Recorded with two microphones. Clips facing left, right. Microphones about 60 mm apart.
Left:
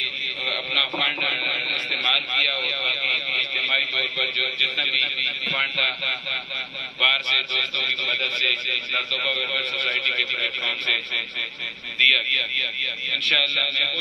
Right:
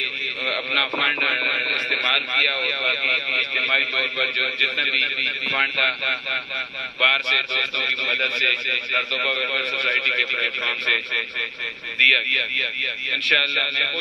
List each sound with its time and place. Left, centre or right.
0.0 s a man's voice: right